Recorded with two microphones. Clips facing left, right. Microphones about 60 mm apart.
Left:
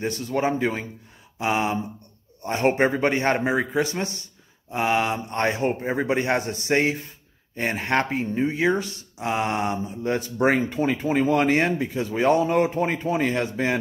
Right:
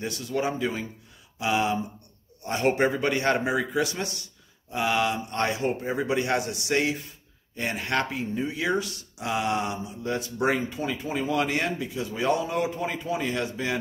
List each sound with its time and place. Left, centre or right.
0.0 s a man's voice: left